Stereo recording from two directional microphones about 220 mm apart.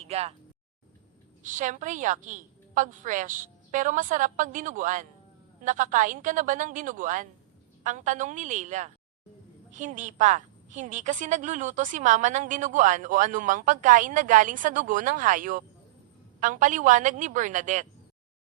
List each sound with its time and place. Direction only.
0.0 s speech: 30° right (ahead or behind)
1.4 s a woman's voice: 35° right (ahead or behind)